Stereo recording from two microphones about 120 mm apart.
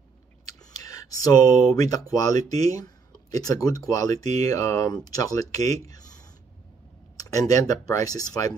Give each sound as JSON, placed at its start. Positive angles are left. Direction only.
{"t": 0.7, "sound": "speech", "side_deg": 30}
{"t": 7.2, "sound": "speech", "side_deg": 30}